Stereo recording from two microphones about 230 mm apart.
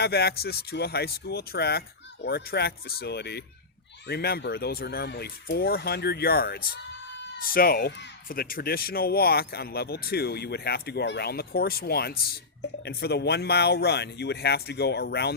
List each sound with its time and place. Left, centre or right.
0.0 s speech: left